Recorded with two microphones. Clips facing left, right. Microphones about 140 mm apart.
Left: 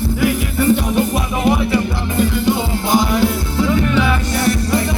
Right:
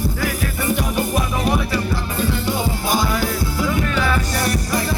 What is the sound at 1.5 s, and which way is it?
Music, 20° left (ahead or behind).